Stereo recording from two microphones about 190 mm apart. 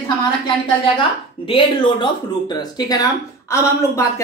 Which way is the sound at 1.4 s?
25° left (ahead or behind).